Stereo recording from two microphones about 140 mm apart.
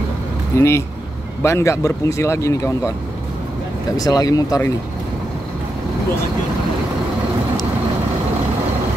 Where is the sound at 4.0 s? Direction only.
25° left (ahead or behind).